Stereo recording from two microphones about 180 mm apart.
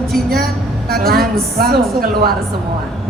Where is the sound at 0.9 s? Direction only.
55° right (ahead or behind).